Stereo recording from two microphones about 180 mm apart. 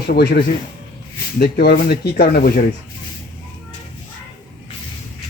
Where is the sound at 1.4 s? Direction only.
60° left (ahead or behind).